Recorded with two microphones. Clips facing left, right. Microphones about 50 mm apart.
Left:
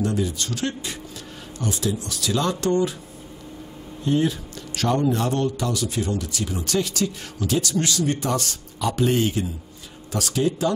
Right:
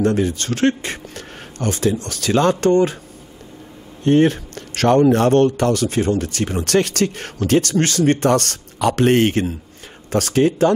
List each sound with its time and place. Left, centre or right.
0.0 s a man's voice: right
4.0 s a man's voice: right